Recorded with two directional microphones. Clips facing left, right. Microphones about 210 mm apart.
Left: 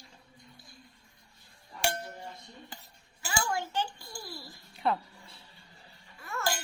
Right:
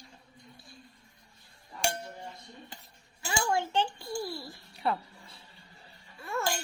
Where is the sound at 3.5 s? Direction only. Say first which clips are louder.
Right 4 dB; 25° right (ahead or behind).